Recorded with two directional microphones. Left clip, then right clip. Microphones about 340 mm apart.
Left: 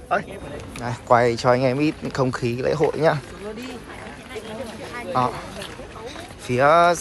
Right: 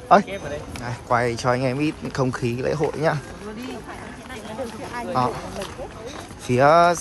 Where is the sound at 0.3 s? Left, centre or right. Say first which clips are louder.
Right 4 dB; centre.